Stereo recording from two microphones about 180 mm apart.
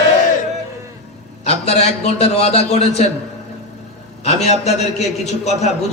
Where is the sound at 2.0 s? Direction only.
35° left (ahead or behind).